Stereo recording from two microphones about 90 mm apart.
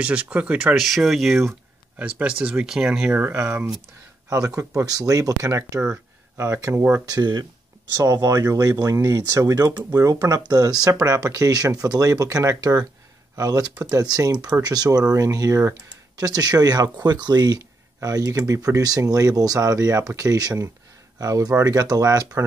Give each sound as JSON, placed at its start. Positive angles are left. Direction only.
{"t": 0.0, "sound": "speech", "side_deg": -15}
{"t": 0.7, "sound": "speech", "side_deg": 0}
{"t": 2.0, "sound": "speech", "side_deg": -15}
{"t": 3.2, "sound": "speech", "side_deg": -25}
{"t": 7.1, "sound": "speech", "side_deg": -55}
{"t": 8.0, "sound": "speech", "side_deg": -40}
{"t": 9.7, "sound": "speech", "side_deg": -45}